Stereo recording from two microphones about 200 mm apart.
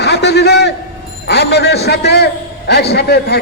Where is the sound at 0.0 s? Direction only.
55° left (ahead or behind).